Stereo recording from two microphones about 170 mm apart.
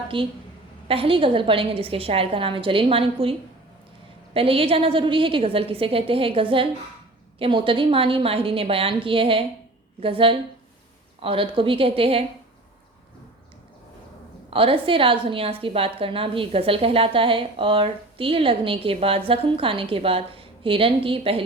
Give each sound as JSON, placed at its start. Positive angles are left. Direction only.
{"t": 0.1, "sound": "a woman's voice", "side_deg": -30}
{"t": 4.4, "sound": "a woman's voice", "side_deg": -35}
{"t": 14.5, "sound": "a woman's voice", "side_deg": -35}